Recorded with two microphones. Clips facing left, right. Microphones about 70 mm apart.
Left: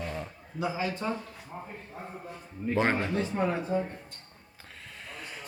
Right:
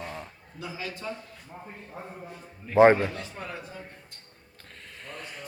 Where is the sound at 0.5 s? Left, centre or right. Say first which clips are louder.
Left 6 dB; left.